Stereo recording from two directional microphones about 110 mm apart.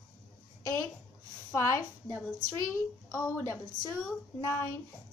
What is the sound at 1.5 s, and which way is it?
A woman's voice, 25° left (ahead or behind).